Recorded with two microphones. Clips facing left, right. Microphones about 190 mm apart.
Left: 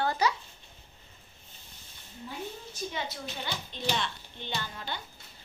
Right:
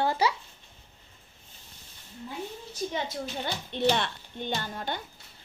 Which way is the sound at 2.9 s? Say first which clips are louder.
Right 5 dB; 50° right (ahead or behind).